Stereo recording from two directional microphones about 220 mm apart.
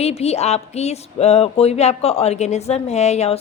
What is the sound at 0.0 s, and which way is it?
Speech, 30° left (ahead or behind).